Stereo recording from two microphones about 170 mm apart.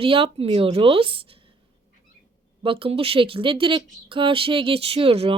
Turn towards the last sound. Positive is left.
turn(degrees=-35)  # may be behind; listen again after turning